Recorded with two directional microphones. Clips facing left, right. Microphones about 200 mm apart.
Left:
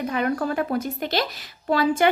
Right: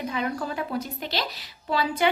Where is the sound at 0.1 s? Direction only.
55° left (ahead or behind).